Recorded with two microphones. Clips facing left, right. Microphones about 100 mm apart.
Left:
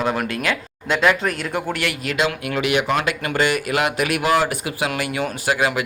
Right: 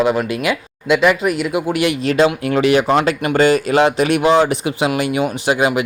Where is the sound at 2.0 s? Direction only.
35° right (ahead or behind).